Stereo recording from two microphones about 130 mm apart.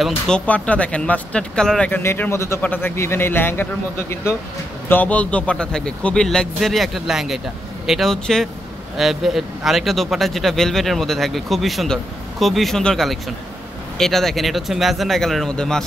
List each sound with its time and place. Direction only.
0.0 s speech: 10° left (ahead or behind)